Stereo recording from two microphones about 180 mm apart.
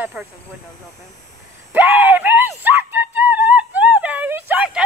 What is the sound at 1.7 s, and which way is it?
Music, 10° right (ahead or behind).